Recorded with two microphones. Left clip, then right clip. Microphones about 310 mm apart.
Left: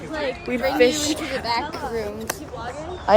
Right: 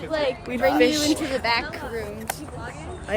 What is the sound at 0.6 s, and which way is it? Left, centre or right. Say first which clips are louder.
Speech: right 2 dB; right.